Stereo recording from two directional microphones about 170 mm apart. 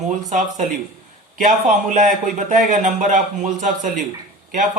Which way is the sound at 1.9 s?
50° right (ahead or behind).